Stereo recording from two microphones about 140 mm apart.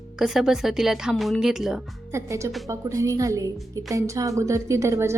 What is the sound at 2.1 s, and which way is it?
A woman's voice, 20° right (ahead or behind).